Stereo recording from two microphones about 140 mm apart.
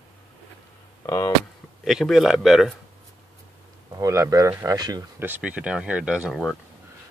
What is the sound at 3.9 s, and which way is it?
Speech, 25° right (ahead or behind).